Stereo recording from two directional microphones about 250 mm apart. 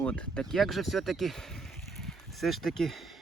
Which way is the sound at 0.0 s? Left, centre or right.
Centre.